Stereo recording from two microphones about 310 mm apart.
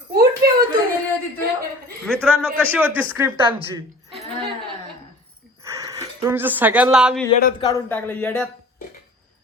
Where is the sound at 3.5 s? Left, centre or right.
Centre.